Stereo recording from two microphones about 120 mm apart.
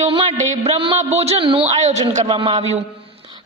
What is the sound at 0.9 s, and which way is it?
Speech, 65° right (ahead or behind).